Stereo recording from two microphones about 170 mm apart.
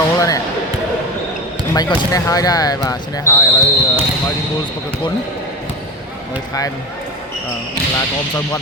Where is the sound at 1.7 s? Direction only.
20° left (ahead or behind).